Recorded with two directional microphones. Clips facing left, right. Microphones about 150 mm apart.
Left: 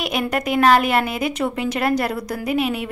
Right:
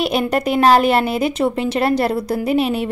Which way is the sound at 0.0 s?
30° right (ahead or behind).